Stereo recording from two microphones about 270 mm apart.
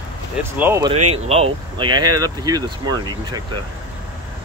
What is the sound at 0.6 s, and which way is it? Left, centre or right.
Speech, centre.